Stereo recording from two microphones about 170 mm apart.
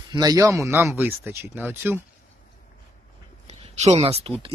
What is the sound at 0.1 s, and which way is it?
Speech, 20° right (ahead or behind).